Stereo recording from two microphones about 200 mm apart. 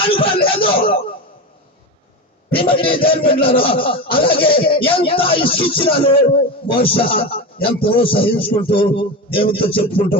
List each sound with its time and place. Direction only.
0.0 s a man's voice: 25° left (ahead or behind)
2.6 s a man's voice: 25° left (ahead or behind)